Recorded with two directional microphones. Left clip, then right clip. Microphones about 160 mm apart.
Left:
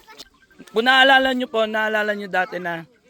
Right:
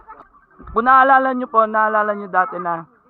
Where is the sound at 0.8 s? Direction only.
30° right (ahead or behind).